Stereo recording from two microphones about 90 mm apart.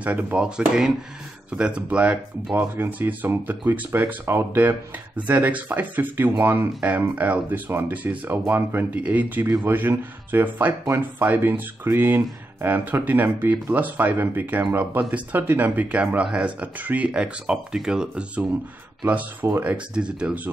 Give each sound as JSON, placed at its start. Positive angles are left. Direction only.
{"t": 0.0, "sound": "speech", "side_deg": -15}